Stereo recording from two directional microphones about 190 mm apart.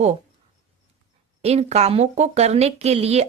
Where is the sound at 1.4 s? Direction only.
35° right (ahead or behind).